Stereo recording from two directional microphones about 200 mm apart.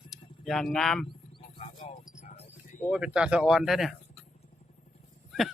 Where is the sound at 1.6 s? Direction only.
30° left (ahead or behind).